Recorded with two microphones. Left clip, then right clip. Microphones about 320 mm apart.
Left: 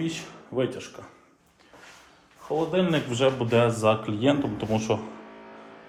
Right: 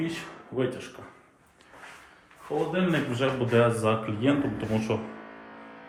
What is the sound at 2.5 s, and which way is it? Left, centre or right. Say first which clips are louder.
A man's voice: left 3 dB; centre.